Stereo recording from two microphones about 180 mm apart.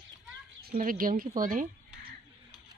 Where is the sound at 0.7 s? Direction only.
50° right (ahead or behind).